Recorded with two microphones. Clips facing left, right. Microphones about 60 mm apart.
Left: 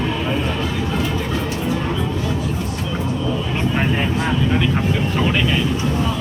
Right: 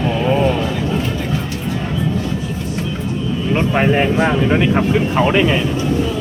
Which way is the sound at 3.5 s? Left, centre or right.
Right.